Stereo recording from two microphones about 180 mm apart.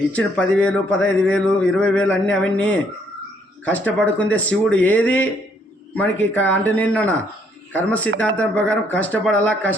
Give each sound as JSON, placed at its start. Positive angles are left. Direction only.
{"t": 0.1, "sound": "speech", "side_deg": 5}